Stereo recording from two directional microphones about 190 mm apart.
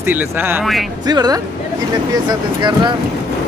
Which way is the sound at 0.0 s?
10° right (ahead or behind).